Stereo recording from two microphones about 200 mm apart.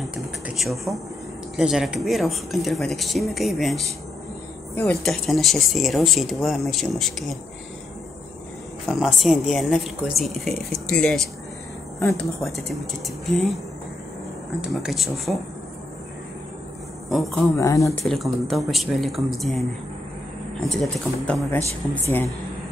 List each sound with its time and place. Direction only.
0.1 s a sound: centre (ahead or behind)
1.6 s speech: 5° right (ahead or behind)
8.8 s speech: centre (ahead or behind)
12.4 s speech: centre (ahead or behind)
14.6 s speech: centre (ahead or behind)
17.1 s speech: centre (ahead or behind)
17.6 s speech: 15° left (ahead or behind)
18.0 s speech: centre (ahead or behind)
20.6 s speech: centre (ahead or behind)